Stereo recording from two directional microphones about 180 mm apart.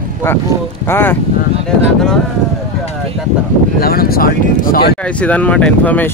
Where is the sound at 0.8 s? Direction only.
10° left (ahead or behind).